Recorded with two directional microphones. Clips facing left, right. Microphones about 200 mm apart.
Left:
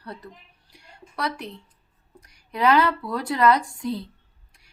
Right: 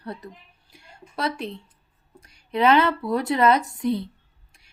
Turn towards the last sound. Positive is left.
turn(degrees=-20)  # may be behind; listen again after turning